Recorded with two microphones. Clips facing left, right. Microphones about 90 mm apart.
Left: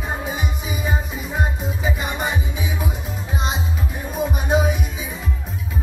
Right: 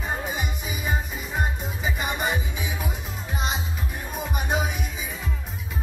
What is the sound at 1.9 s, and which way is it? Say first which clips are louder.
Music: left 2 dB; centre (ahead or behind).